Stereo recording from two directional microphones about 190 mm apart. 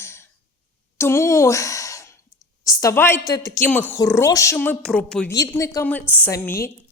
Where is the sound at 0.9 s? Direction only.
15° left (ahead or behind).